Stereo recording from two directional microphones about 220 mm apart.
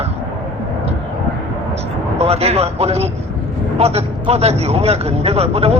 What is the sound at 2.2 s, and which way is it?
A man's voice, 30° right (ahead or behind).